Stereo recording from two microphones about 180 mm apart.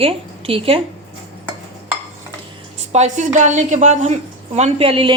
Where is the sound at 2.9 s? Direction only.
40° right (ahead or behind).